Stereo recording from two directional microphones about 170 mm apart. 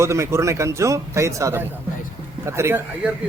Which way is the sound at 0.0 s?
15° right (ahead or behind).